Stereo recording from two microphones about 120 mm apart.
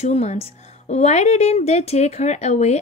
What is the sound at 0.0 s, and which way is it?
A woman's voice, 65° left (ahead or behind).